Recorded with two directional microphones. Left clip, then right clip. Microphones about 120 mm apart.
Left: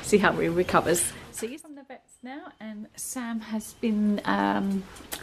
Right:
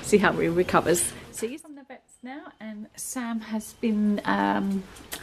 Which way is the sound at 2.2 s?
5° right (ahead or behind).